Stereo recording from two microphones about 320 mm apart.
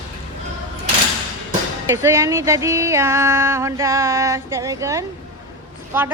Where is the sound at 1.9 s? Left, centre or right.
Centre.